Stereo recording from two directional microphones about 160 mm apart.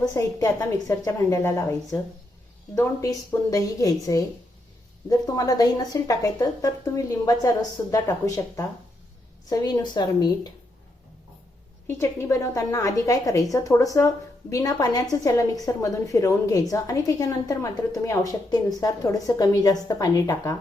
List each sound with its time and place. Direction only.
0.0 s a woman's voice: 20° left (ahead or behind)
11.9 s a woman's voice: 20° left (ahead or behind)